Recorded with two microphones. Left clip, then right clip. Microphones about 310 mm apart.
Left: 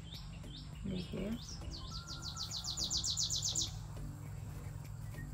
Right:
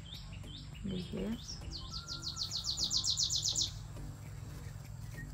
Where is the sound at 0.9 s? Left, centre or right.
Centre.